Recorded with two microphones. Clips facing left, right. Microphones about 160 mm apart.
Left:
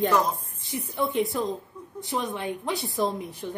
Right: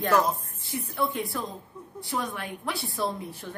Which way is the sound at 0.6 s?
20° left (ahead or behind).